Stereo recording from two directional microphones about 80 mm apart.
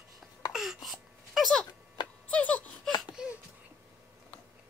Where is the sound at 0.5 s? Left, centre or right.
Centre.